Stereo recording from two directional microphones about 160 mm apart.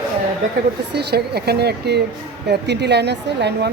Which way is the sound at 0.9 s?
90° right.